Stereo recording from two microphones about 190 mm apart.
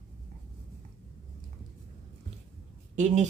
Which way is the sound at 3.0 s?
40° right (ahead or behind).